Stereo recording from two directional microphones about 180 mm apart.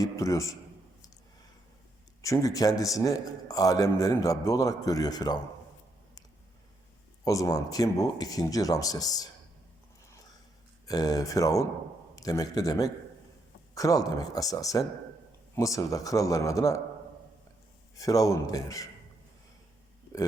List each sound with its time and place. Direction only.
0.0 s speech: 15° left (ahead or behind)
2.2 s a man's voice: 20° left (ahead or behind)
7.3 s a man's voice: 20° left (ahead or behind)
10.1 s a sound: 20° left (ahead or behind)
10.8 s a man's voice: 20° left (ahead or behind)
17.9 s a man's voice: 20° left (ahead or behind)